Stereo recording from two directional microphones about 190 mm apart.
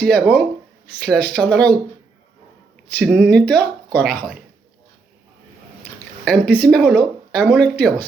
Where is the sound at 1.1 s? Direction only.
5° left (ahead or behind).